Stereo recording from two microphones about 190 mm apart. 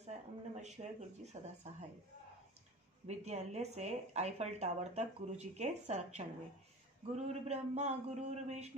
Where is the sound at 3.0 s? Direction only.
35° right (ahead or behind).